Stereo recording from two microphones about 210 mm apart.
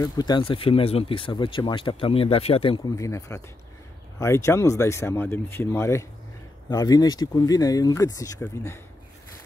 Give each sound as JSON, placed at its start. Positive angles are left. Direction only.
{"t": 0.0, "sound": "speech", "side_deg": 20}
{"t": 3.0, "sound": "speech", "side_deg": 15}